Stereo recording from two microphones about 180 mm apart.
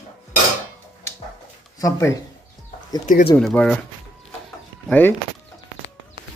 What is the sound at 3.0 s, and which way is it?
Speech, 50° left (ahead or behind).